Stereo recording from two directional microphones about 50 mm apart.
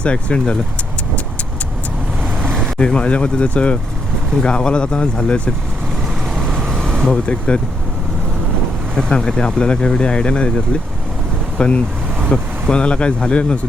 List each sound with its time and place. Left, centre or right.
0.0 s speech: left
2.7 s speech: left
6.5 s vehicle: centre
7.3 s speech: left
9.0 s speech: centre
11.5 s speech: left